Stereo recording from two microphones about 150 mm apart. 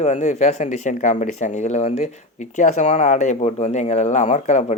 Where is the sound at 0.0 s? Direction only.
50° left (ahead or behind).